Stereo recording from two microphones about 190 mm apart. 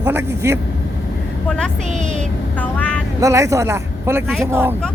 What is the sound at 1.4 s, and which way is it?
Speech, 5° left (ahead or behind).